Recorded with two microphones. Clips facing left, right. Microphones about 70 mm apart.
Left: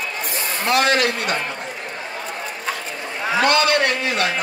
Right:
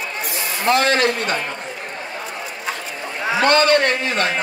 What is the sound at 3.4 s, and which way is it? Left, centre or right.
Speech, right.